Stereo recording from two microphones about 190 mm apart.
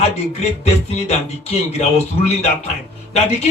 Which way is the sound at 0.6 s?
35° left (ahead or behind).